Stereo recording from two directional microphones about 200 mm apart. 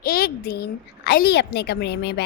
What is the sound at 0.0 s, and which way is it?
A woman's voice, 50° left (ahead or behind).